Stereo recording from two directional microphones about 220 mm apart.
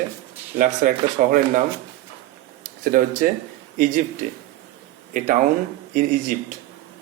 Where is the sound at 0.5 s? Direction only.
40° right (ahead or behind).